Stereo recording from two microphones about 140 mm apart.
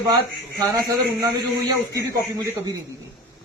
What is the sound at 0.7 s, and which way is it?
A man's voice, 25° right (ahead or behind).